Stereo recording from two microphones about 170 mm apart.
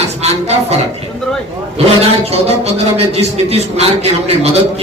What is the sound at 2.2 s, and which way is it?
A man's voice, 35° right (ahead or behind).